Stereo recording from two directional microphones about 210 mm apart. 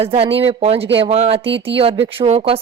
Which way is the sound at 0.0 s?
25° right (ahead or behind).